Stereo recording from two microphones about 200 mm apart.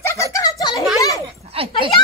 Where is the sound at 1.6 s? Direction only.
30° right (ahead or behind).